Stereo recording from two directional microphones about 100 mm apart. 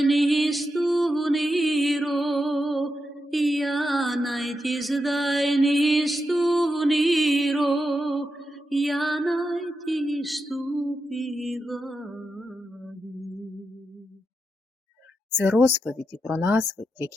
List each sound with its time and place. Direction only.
0.0 s music: centre (ahead or behind)
15.3 s speech: 20° right (ahead or behind)